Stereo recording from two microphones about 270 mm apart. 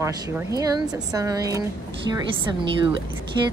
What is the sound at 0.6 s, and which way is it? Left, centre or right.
A woman's voice, centre.